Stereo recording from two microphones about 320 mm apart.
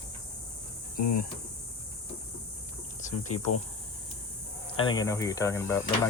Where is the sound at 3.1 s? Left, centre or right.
Left.